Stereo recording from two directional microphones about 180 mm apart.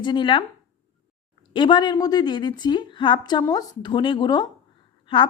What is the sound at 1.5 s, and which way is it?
A woman's voice, 25° left (ahead or behind).